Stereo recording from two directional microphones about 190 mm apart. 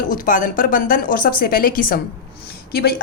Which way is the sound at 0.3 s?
45° left (ahead or behind).